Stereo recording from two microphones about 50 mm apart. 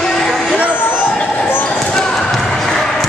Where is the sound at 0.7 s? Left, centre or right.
Left.